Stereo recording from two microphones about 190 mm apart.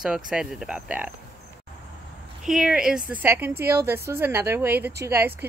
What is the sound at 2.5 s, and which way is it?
A woman's voice, 5° right (ahead or behind).